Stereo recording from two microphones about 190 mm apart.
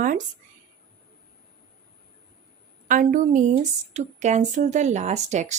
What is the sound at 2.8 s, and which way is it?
A woman's voice, 45° right (ahead or behind).